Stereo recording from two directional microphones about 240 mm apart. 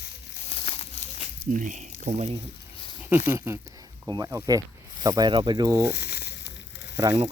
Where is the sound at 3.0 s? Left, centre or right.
Centre.